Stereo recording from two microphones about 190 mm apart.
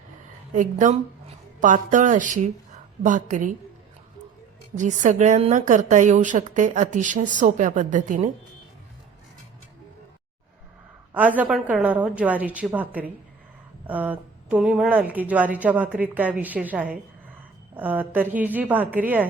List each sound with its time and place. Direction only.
0.5 s a woman's voice: 40° right (ahead or behind)
4.8 s a woman's voice: 40° right (ahead or behind)
11.1 s a woman's voice: 10° right (ahead or behind)